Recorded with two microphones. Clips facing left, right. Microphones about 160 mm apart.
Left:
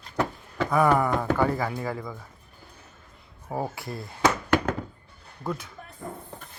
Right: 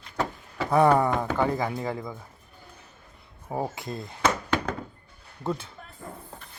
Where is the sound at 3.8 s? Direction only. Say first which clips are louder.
Right 1 dB; 20° right (ahead or behind).